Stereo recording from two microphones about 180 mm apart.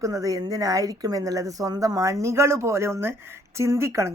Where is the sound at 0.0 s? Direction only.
20° right (ahead or behind).